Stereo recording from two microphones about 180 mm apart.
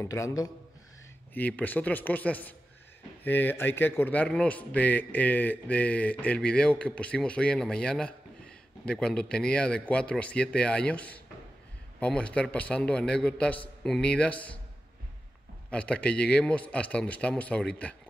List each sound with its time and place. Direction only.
0.0 s a man's voice: 15° left (ahead or behind)
15.7 s a man's voice: 5° left (ahead or behind)